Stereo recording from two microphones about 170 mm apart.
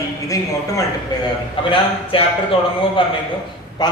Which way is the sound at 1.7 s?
30° left (ahead or behind).